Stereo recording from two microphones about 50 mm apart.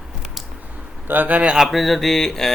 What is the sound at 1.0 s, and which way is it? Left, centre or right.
Speech, right.